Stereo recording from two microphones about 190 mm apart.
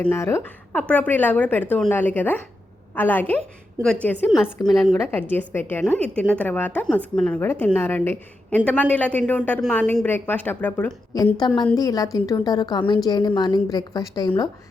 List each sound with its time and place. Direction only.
0.0 s speech: 15° left (ahead or behind)
11.3 s a woman's voice: 25° left (ahead or behind)